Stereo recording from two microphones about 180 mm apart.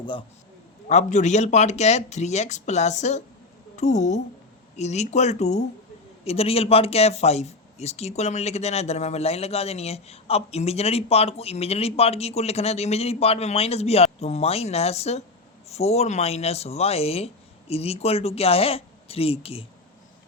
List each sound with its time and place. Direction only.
0.0 s a man's voice: 30° left (ahead or behind)
0.9 s speech: 40° left (ahead or behind)